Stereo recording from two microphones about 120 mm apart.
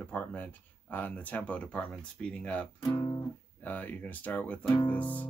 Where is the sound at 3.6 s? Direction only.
15° left (ahead or behind).